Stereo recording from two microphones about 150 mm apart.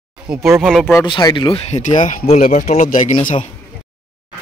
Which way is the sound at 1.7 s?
55° left (ahead or behind).